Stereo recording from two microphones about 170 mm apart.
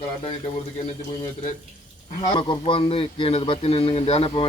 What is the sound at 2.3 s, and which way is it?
Speech, 30° left (ahead or behind).